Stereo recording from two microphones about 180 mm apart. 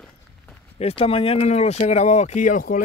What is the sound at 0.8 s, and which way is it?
Speech, 30° left (ahead or behind).